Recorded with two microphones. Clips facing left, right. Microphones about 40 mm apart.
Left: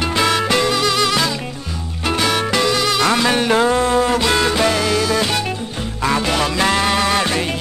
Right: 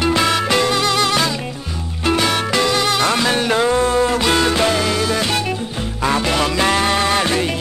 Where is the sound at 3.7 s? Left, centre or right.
Left.